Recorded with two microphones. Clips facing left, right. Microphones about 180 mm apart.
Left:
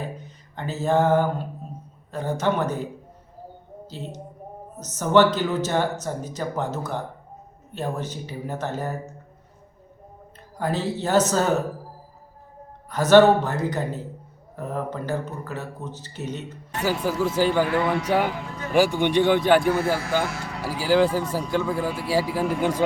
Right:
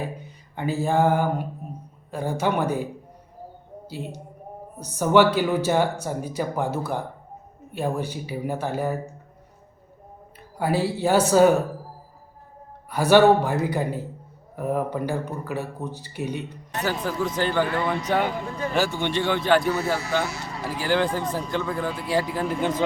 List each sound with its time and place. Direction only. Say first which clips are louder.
0.3 s a sound: right 5 dB; 10° right (ahead or behind)
2.0 s speech: left 1 dB; 10° right (ahead or behind)
3.8 s speech: right 2 dB; 10° right (ahead or behind)
10.6 s speech: right 3 dB; 10° right (ahead or behind)
12.9 s speech: left 1 dB; 10° right (ahead or behind)
16.8 s speech: left 3 dB; 10° left (ahead or behind)
19.6 s speech: left 2 dB; 50° left (ahead or behind)
20.6 s speech: left 4 dB; 5° left (ahead or behind)